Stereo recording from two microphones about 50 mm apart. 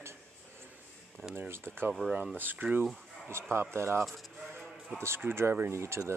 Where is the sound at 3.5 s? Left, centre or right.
Right.